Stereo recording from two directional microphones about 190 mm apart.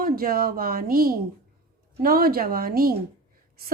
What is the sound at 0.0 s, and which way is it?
Speech, 50° right (ahead or behind).